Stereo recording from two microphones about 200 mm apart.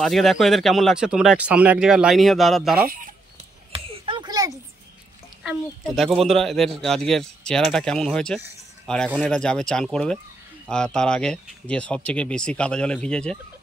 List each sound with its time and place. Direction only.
0.0 s speech: centre (ahead or behind)
3.7 s a sound: 25° right (ahead or behind)
5.4 s speech: centre (ahead or behind)